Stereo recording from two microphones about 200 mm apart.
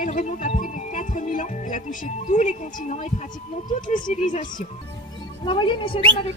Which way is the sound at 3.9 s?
40° left (ahead or behind).